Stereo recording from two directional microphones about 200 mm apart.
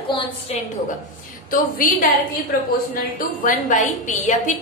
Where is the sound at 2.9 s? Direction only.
45° left (ahead or behind).